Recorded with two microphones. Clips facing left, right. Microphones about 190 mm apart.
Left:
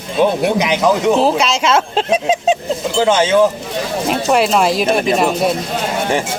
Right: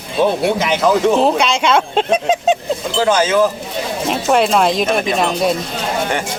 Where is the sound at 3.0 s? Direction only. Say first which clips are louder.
Left 1 dB; 25° left (ahead or behind).